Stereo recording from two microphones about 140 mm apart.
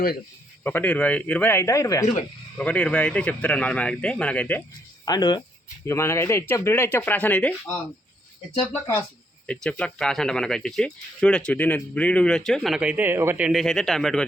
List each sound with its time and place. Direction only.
0.6 s speech: 15° left (ahead or behind)
2.6 s speech: 10° left (ahead or behind)
5.0 s speech: 30° left (ahead or behind); by 14.3 s 5° left (ahead or behind)